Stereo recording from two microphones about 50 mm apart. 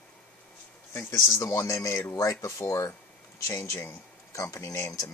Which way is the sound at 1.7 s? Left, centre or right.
Left.